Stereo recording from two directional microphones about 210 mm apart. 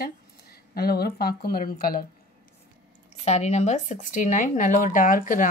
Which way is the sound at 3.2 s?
30° left (ahead or behind).